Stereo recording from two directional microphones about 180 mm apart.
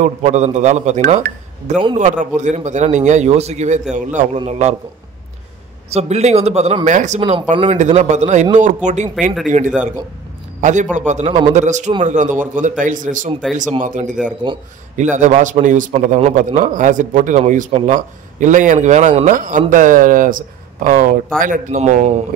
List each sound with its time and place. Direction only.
0.0 s a man's voice: 40° right (ahead or behind)
5.9 s a man's voice: 35° right (ahead or behind)